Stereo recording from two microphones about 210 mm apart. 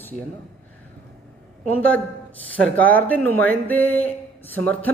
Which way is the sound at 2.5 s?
5° left (ahead or behind).